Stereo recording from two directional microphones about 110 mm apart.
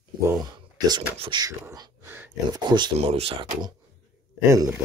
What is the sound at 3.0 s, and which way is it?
Speech, 70° right (ahead or behind).